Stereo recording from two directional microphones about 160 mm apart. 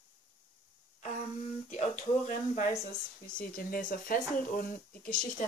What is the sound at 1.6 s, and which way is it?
Speech, 45° left (ahead or behind).